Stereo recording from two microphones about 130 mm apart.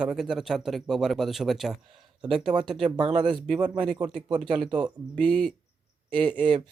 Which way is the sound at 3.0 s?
45° right (ahead or behind).